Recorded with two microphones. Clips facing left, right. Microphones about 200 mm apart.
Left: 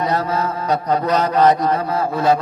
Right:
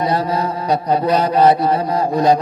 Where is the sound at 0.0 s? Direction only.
15° right (ahead or behind).